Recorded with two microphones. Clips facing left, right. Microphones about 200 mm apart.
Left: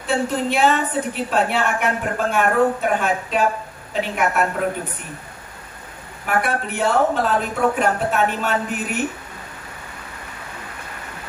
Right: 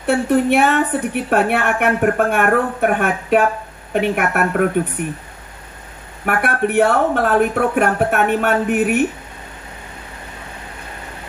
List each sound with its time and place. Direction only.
0.0 s a woman's voice: 60° right (ahead or behind)
6.2 s a woman's voice: 60° right (ahead or behind)